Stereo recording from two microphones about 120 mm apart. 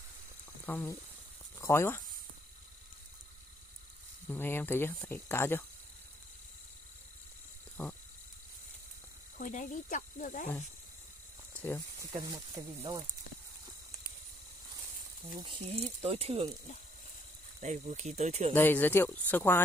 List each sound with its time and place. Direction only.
0.7 s speech: 20° left (ahead or behind)
4.3 s speech: 15° left (ahead or behind)
9.4 s speech: 90° left
11.5 s snake: 15° left (ahead or behind)
12.2 s speech: 30° right (ahead or behind)
15.3 s speech: 40° right (ahead or behind)
15.7 s speech: 55° right (ahead or behind)
17.6 s speech: 80° right
18.5 s speech: 15° left (ahead or behind)